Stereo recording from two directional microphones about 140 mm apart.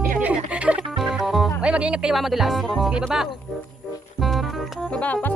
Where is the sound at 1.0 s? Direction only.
Centre (ahead or behind).